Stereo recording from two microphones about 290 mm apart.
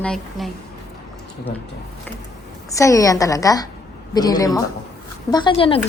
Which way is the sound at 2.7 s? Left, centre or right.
Centre.